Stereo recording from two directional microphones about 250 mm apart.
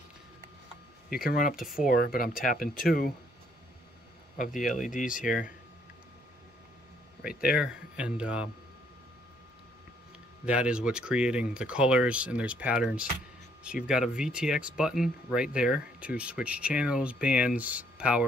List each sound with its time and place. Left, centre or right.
1.1 s speech: left
4.5 s speech: centre
4.9 s speech: left
5.2 s speech: centre
7.2 s speech: centre
10.4 s speech: centre